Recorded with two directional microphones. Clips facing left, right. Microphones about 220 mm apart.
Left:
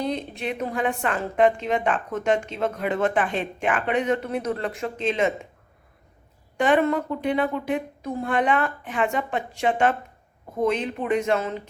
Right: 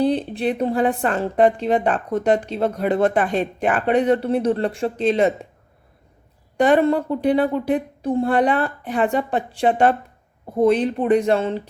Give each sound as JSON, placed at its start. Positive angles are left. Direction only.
{"t": 0.0, "sound": "a woman's voice", "side_deg": -35}
{"t": 6.6, "sound": "a woman's voice", "side_deg": -35}